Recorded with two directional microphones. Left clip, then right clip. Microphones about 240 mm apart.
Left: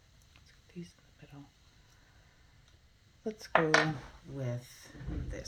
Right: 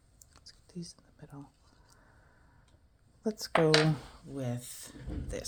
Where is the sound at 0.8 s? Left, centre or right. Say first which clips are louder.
Right 3 dB; right.